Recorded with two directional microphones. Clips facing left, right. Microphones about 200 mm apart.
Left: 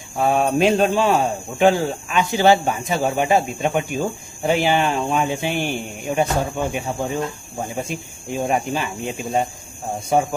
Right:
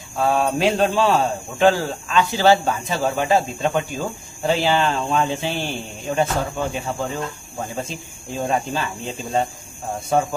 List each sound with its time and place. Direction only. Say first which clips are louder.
0.2 s speech: left 2 dB; 20° left (ahead or behind)